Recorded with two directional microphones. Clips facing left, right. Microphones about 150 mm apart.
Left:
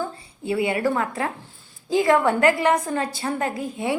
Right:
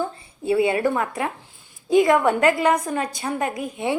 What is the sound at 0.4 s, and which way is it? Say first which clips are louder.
A woman's voice: right 3 dB; 25° right (ahead or behind).